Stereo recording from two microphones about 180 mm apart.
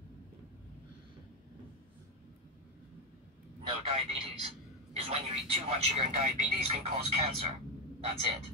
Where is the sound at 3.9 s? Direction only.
30° right (ahead or behind).